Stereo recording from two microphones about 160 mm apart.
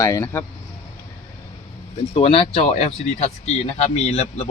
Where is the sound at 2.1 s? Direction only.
35° left (ahead or behind).